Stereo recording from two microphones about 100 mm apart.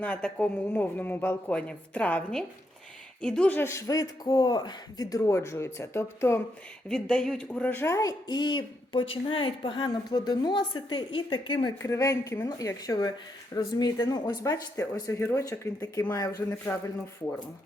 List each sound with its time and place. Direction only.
0.0 s speech: 10° left (ahead or behind)
3.6 s speech: 30° left (ahead or behind)
6.8 s speech: 5° left (ahead or behind); by 8.1 s 30° left (ahead or behind)
8.3 s speech: 45° left (ahead or behind)
11.8 s speech: 30° left (ahead or behind)